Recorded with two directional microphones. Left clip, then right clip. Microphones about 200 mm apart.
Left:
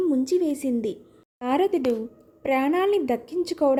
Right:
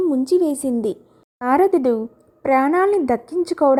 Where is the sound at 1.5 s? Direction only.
Centre (ahead or behind).